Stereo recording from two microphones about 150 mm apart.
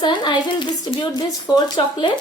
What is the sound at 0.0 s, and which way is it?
A woman's voice, 30° left (ahead or behind).